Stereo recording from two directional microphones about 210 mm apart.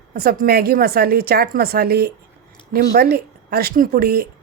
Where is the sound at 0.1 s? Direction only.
45° right (ahead or behind).